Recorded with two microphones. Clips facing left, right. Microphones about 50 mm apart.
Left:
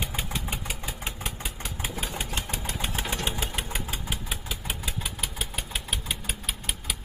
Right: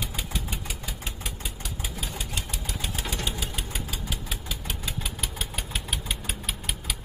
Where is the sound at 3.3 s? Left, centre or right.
Left.